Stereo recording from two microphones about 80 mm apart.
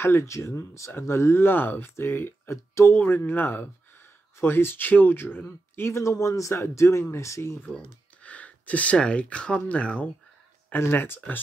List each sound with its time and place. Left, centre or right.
0.0 s speech: left
8.2 s a sound: centre
8.9 s speech: centre
10.7 s speech: left